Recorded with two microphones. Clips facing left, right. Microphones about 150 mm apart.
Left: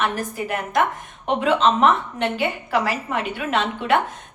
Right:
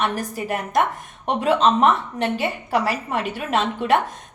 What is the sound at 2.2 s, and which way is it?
A woman's voice, 40° right (ahead or behind).